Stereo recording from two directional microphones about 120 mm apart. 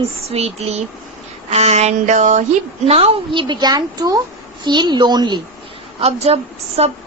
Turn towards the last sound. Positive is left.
turn(degrees=-60)  # may be behind; listen again after turning